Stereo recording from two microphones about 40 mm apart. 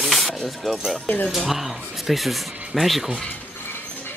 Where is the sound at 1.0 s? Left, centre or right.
Left.